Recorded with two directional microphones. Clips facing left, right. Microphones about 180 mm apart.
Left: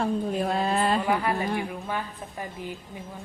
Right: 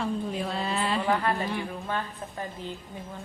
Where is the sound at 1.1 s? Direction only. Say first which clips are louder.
Left 1 dB; 15° left (ahead or behind).